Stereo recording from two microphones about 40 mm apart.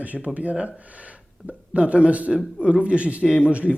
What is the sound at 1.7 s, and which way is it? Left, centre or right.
Speech, right.